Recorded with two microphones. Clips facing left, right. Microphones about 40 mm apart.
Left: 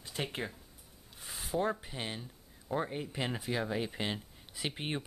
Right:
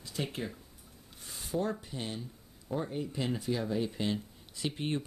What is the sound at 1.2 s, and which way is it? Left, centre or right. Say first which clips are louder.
Speech: left 1 dB; centre.